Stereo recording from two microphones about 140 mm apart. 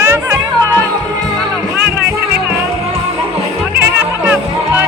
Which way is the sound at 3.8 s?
10° right (ahead or behind).